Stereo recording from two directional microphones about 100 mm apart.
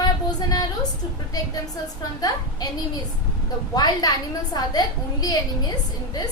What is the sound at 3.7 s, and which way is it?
A woman's voice, 40° left (ahead or behind).